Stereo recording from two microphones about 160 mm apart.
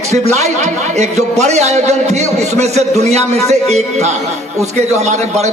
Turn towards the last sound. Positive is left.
turn(degrees=-45)  # may be behind; listen again after turning